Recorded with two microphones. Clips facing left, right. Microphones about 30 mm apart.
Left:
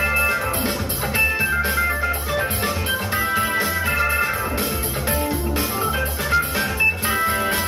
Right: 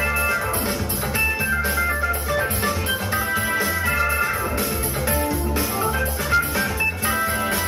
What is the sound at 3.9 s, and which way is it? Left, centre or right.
Music, centre.